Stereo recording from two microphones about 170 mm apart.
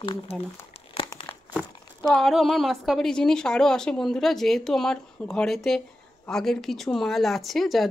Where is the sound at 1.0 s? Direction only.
30° left (ahead or behind).